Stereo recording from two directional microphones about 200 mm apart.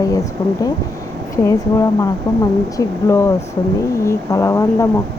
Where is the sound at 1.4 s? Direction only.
15° left (ahead or behind).